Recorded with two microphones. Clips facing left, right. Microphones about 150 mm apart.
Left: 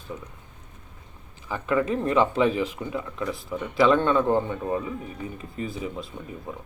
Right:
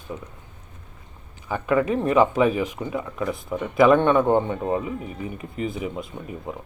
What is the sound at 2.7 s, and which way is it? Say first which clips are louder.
Speech: right 3 dB; 20° right (ahead or behind).